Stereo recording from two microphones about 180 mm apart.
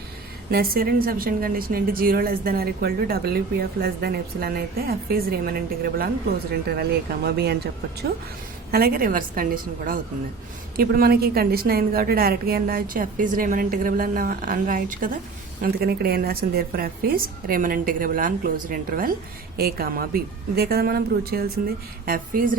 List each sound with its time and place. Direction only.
0.5 s a woman's voice: 55° right (ahead or behind)
8.7 s a woman's voice: 55° right (ahead or behind)